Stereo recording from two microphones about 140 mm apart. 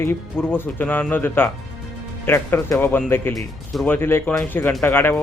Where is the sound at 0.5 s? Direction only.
15° left (ahead or behind).